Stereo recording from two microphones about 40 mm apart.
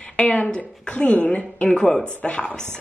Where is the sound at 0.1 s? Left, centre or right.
Left.